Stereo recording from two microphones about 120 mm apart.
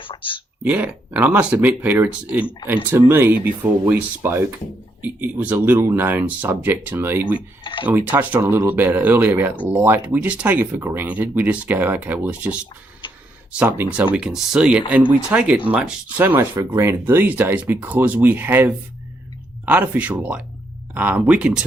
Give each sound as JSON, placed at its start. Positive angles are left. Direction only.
{"t": 0.0, "sound": "a sound", "side_deg": 45}
{"t": 0.6, "sound": "speech", "side_deg": -15}
{"t": 7.3, "sound": "speech", "side_deg": 45}
{"t": 8.1, "sound": "speech", "side_deg": -15}